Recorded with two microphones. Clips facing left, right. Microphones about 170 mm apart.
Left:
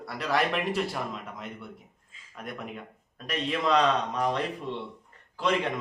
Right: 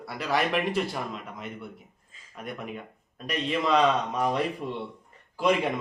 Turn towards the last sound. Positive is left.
turn(degrees=-10)  # may be behind; listen again after turning